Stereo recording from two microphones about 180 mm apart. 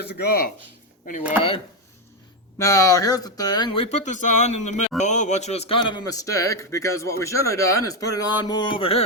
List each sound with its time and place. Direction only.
0.0 s speech: 60° left (ahead or behind)
2.6 s a man's voice: 15° left (ahead or behind)